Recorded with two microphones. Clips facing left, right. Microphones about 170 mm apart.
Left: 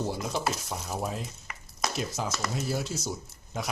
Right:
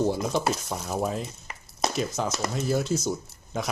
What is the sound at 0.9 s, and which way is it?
Speech, centre (ahead or behind).